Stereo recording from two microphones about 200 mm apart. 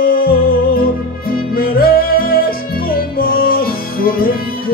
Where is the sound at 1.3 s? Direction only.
50° left (ahead or behind).